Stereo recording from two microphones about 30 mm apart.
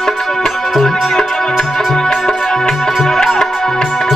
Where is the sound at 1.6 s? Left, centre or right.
Centre.